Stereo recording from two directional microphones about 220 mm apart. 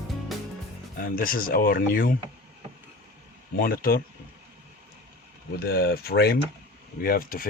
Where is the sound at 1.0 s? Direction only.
40° left (ahead or behind).